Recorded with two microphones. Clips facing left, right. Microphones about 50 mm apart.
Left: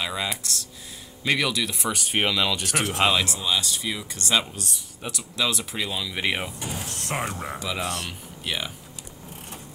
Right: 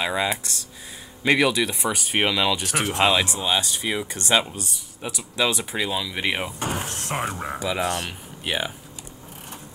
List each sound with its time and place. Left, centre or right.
0.0 s speech: right; by 3.1 s centre
3.1 s speech: right
5.3 s speech: right; by 6.5 s centre
6.6 s speech: right
7.1 s speech: centre
7.8 s speech: right
8.1 s speech: right